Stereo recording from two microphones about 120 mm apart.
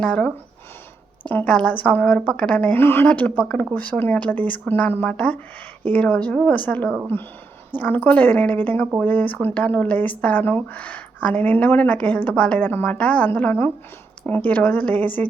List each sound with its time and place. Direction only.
0.0 s speech: 10° left (ahead or behind)